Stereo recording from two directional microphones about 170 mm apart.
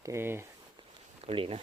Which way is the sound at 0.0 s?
15° right (ahead or behind).